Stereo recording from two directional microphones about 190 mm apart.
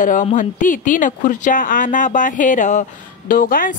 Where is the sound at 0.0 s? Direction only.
40° left (ahead or behind).